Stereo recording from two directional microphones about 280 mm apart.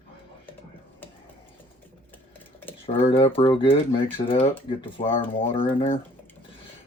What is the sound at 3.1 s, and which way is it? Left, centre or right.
Speech, centre.